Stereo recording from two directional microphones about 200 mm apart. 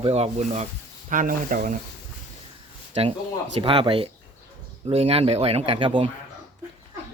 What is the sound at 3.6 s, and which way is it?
Burping, 25° right (ahead or behind).